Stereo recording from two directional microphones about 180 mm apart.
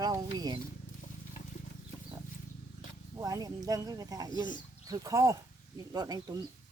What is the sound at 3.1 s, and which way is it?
Speech, 20° right (ahead or behind).